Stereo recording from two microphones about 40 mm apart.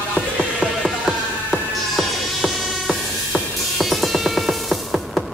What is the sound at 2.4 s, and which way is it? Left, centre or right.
Music, left.